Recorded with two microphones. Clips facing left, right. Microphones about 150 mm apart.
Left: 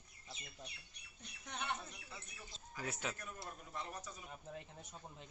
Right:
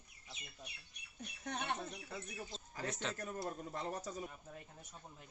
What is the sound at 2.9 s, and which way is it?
Speech, 5° left (ahead or behind).